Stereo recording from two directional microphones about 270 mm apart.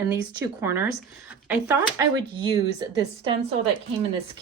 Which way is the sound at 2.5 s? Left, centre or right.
Centre.